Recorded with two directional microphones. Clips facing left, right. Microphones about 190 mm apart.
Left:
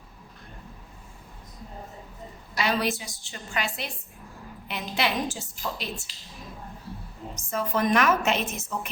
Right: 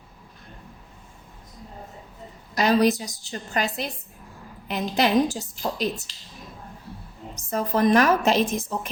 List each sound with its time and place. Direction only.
2.6 s a woman's voice: 40° right (ahead or behind)
4.7 s a woman's voice: 40° right (ahead or behind)
7.5 s a woman's voice: 40° right (ahead or behind)